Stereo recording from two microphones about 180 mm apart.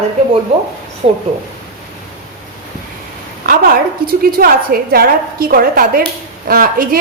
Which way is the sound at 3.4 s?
50° right (ahead or behind).